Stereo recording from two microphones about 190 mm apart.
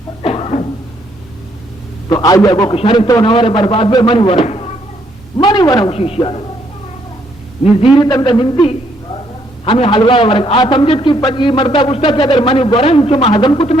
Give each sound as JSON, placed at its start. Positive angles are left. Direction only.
{"t": 0.2, "sound": "a sound", "side_deg": 30}
{"t": 2.0, "sound": "a man's voice", "side_deg": 20}
{"t": 7.9, "sound": "a man's voice", "side_deg": 20}